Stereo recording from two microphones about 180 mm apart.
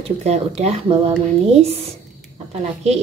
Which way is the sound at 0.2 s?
35° right (ahead or behind).